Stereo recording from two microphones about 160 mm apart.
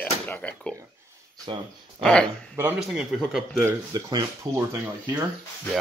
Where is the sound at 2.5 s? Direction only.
10° right (ahead or behind).